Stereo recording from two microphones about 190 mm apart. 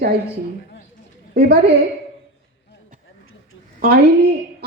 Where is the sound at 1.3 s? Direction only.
55° right (ahead or behind).